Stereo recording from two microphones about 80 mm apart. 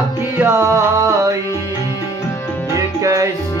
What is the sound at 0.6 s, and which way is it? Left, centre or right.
Music, right.